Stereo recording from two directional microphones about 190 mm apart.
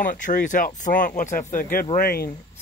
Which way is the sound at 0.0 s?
45° left (ahead or behind).